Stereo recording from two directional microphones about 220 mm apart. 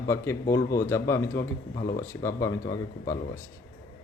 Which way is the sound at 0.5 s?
15° left (ahead or behind).